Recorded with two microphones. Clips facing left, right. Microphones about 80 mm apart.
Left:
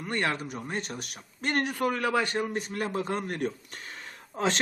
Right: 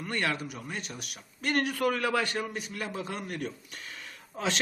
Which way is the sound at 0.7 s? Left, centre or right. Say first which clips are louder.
Left 7 dB; left.